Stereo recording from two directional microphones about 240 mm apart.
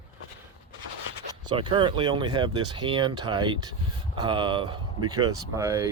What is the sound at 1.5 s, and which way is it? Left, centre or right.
Speech, right.